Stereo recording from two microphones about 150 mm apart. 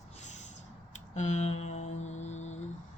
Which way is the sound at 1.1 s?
50° left (ahead or behind).